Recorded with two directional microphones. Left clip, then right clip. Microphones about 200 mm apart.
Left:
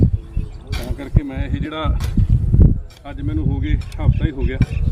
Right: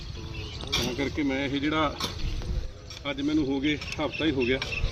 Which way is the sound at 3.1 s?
25° left (ahead or behind).